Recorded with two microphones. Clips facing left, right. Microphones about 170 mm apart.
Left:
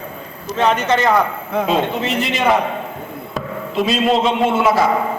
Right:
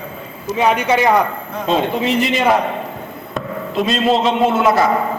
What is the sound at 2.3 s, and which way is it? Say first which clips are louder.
A man's voice: right 1 dB; centre (ahead or behind).